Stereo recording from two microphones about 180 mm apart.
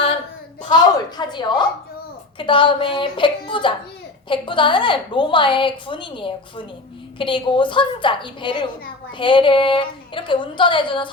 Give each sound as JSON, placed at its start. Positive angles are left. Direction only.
{"t": 0.7, "sound": "a woman's voice", "side_deg": 25}